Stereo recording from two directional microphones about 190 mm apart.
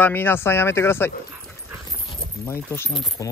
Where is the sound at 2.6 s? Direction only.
10° left (ahead or behind).